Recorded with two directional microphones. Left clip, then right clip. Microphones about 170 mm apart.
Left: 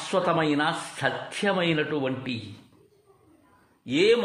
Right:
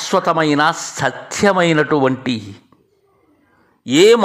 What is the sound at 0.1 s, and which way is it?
A man's voice, 35° right (ahead or behind).